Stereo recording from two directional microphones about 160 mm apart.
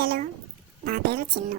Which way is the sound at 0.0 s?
65° right (ahead or behind).